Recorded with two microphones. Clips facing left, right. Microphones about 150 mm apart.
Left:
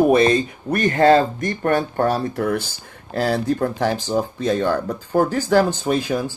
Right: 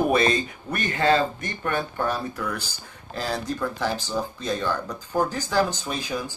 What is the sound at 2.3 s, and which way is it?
Speech, 60° left (ahead or behind).